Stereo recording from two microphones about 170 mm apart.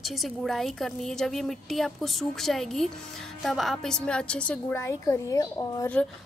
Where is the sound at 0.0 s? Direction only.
Centre (ahead or behind); by 5.9 s 20° left (ahead or behind).